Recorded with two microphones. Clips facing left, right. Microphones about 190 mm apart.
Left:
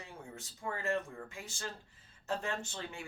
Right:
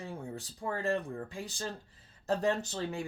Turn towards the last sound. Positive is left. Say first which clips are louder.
# right 6 dB
turn(degrees=-35)  # may be behind; listen again after turning